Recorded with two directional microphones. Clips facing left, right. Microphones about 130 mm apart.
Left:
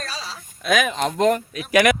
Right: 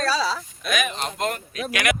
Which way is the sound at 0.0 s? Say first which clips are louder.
Right 10 dB; 90° right.